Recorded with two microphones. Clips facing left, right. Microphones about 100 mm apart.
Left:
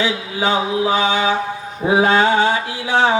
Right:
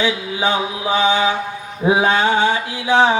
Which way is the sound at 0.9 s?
20° right (ahead or behind).